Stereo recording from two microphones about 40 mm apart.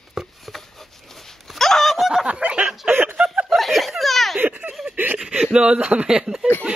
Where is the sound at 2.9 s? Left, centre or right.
Right.